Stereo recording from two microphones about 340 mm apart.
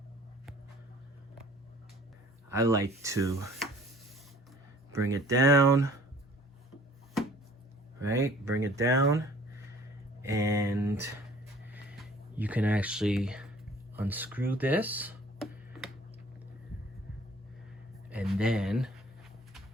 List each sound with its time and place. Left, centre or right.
2.5 s speech: centre
5.1 s speech: centre
8.0 s speech: centre
10.2 s speech: centre
11.7 s a sound: centre
13.9 s speech: centre
18.1 s speech: centre